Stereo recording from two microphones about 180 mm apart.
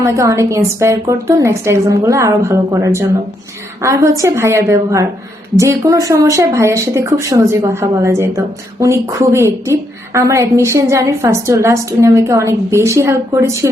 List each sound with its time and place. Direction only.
0.0 s a woman's voice: 15° right (ahead or behind)